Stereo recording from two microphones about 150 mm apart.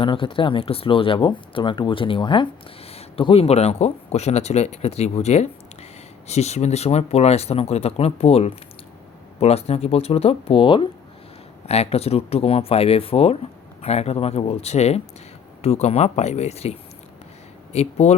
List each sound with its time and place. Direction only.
0.0 s speech: 35° left (ahead or behind)